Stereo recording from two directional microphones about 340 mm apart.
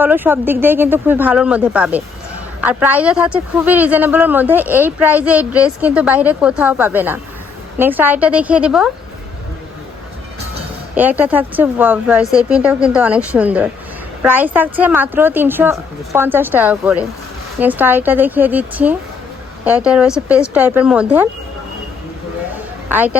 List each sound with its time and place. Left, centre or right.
0.0 s speech: centre
10.9 s speech: centre
22.9 s speech: centre